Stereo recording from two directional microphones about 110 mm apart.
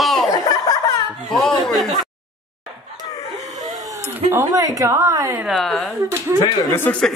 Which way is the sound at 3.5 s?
35° right (ahead or behind).